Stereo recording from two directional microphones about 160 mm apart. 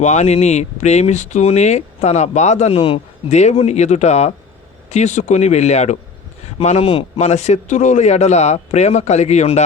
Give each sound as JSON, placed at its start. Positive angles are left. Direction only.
{"t": 0.0, "sound": "speech", "side_deg": 45}